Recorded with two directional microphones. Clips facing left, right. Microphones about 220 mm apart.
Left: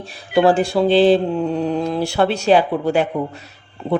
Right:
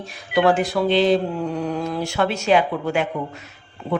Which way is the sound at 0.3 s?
30° left (ahead or behind).